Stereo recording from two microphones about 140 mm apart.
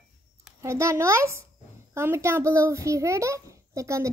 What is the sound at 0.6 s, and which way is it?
A child's voice, 20° right (ahead or behind).